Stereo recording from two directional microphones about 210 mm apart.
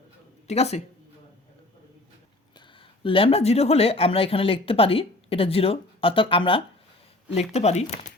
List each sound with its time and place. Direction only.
0.4 s speech: 30° left (ahead or behind)
3.0 s speech: 25° left (ahead or behind)